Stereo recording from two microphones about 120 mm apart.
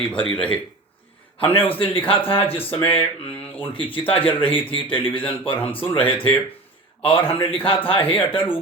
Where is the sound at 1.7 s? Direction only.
50° left (ahead or behind).